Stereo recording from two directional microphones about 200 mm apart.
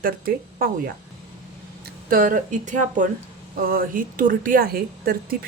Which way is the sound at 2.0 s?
45° right (ahead or behind).